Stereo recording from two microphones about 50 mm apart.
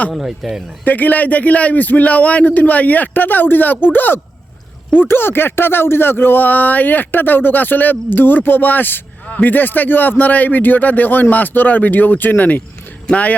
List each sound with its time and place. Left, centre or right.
0.1 s speech: centre
0.9 s speech: left